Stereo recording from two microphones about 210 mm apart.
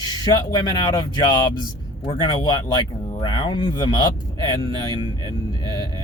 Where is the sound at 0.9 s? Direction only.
20° left (ahead or behind).